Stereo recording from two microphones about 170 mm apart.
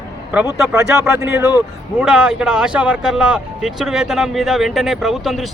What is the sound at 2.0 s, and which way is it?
Speech, 5° right (ahead or behind).